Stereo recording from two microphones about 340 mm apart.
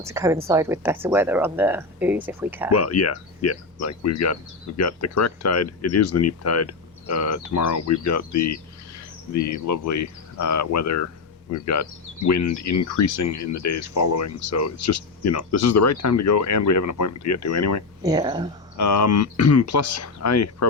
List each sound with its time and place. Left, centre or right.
0.0 s speech: centre
2.7 s speech: left
18.0 s speech: centre
18.8 s speech: left